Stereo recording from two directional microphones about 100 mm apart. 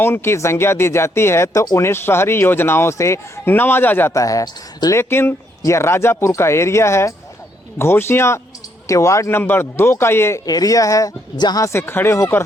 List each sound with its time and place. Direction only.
0.0 s a woman's voice: 25° left (ahead or behind)
10.4 s a woman's voice: 40° left (ahead or behind)
11.6 s speech: 25° left (ahead or behind)